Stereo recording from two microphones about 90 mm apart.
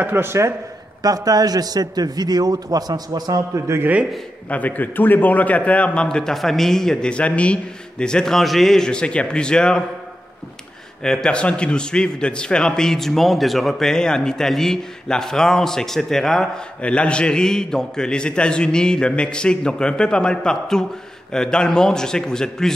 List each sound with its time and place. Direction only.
0.0 s speech: 25° right (ahead or behind)
1.0 s a man's voice: 45° right (ahead or behind)
3.8 s a man's voice: 15° right (ahead or behind)
4.5 s a man's voice: 20° left (ahead or behind)
11.0 s a man's voice: 10° left (ahead or behind)